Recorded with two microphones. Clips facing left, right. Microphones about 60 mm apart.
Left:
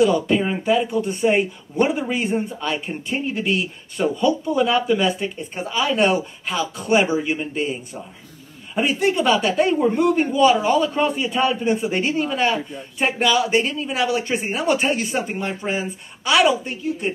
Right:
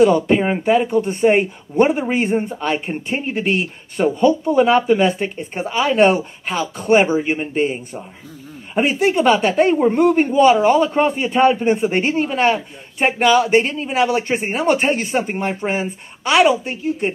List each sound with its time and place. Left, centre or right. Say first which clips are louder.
0.0 s speech: right 4 dB; right